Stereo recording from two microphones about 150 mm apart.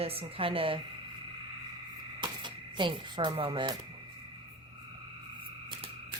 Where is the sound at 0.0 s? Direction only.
40° right (ahead or behind).